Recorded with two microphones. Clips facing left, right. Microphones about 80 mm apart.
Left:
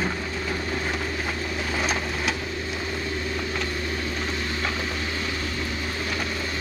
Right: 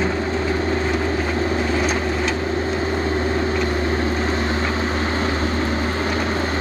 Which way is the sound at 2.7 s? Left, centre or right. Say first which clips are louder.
Right 9 dB; right.